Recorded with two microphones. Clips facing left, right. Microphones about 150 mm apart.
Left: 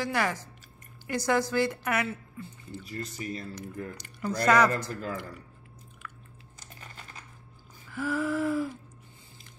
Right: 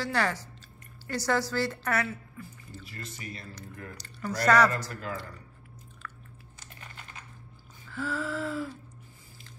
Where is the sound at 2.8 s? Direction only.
35° left (ahead or behind).